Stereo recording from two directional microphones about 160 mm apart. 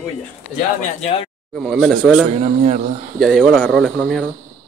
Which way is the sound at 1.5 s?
Centre (ahead or behind).